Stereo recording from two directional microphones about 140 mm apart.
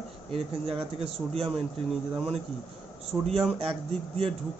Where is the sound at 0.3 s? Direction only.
45° right (ahead or behind).